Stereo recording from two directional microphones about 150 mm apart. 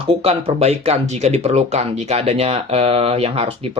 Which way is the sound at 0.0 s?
40° right (ahead or behind).